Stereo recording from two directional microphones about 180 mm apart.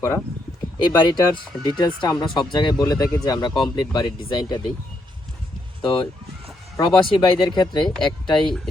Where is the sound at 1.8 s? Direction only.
20° left (ahead or behind).